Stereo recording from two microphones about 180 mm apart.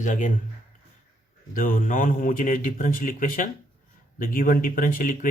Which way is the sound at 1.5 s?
50° left (ahead or behind).